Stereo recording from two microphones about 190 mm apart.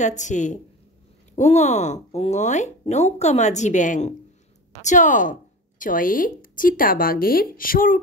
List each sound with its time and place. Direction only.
0.0 s speech: 40° left (ahead or behind)